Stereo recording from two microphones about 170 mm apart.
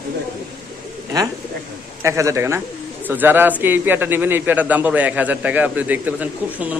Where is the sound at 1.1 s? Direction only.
20° right (ahead or behind).